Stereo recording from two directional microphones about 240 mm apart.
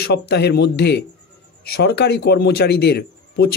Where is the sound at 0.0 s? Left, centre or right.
Left.